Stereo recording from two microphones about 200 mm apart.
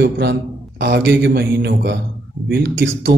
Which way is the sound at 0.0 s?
55° right (ahead or behind).